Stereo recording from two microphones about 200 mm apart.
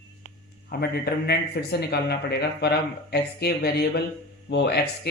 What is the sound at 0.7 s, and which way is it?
Speech, 50° left (ahead or behind).